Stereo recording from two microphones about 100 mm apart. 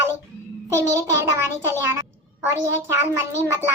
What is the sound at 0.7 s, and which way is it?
A child's voice, 30° right (ahead or behind).